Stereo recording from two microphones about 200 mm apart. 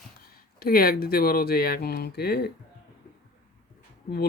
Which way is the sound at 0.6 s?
50° left (ahead or behind).